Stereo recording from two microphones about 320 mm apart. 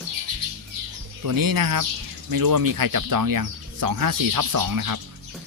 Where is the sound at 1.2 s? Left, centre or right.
Right.